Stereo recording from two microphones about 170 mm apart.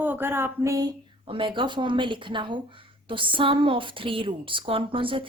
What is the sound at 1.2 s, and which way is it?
Speech, 30° right (ahead or behind).